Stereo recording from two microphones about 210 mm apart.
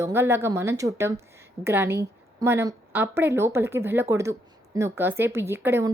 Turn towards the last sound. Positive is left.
turn(degrees=-10)  # may be behind; listen again after turning